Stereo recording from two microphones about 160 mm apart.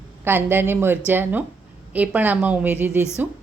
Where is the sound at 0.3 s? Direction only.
15° right (ahead or behind).